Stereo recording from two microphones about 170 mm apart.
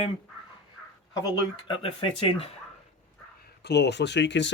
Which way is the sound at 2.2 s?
35° left (ahead or behind).